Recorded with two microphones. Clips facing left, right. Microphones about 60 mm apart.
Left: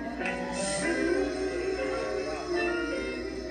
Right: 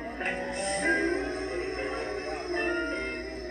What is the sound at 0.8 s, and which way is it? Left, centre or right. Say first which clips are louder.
Music: right 1 dB; right.